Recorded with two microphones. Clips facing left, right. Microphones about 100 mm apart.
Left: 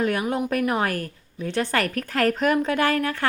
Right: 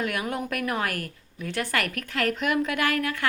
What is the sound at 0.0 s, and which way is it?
A woman's voice, 30° left (ahead or behind).